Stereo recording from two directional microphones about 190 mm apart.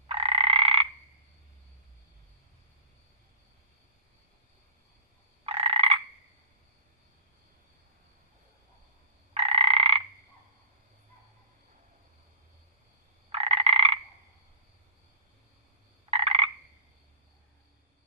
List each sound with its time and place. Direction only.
0.1 s croak: 30° right (ahead or behind)
5.5 s frog: 30° right (ahead or behind)
9.3 s frog: 35° right (ahead or behind)
13.3 s frog: 35° right (ahead or behind)
16.0 s frog: 35° right (ahead or behind)